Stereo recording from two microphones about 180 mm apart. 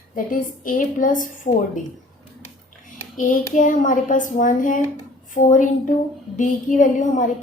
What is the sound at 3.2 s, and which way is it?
A woman's voice, 45° left (ahead or behind).